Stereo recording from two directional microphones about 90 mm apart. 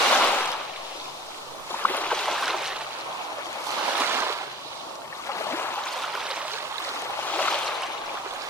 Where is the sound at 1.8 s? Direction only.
20° left (ahead or behind).